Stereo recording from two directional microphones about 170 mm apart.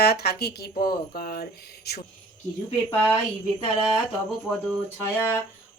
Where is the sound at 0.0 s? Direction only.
70° left (ahead or behind).